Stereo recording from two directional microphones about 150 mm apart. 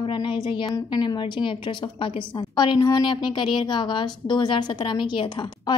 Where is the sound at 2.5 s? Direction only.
30° left (ahead or behind).